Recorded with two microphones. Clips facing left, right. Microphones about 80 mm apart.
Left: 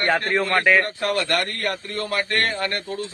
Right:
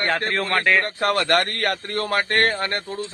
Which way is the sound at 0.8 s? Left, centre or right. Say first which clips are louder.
Right 2 dB; right.